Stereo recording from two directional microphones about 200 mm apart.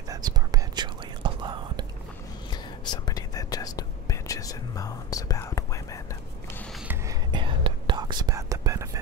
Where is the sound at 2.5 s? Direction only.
20° left (ahead or behind).